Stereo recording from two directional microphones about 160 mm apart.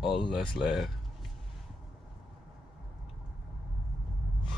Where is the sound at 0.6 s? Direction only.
Centre (ahead or behind).